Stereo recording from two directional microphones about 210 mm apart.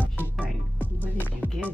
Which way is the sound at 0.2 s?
5° left (ahead or behind).